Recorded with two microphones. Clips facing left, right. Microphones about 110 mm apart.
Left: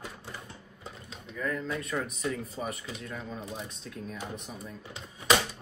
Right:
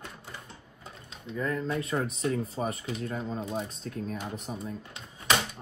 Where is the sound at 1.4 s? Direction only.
30° right (ahead or behind).